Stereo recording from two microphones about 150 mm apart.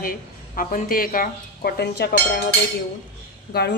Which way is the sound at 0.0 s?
70° left (ahead or behind).